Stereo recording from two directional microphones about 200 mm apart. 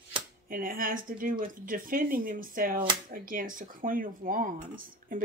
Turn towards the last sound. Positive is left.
turn(degrees=-45)  # may be behind; listen again after turning